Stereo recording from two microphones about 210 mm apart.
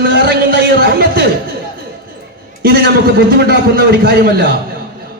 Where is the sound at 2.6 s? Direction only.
50° right (ahead or behind).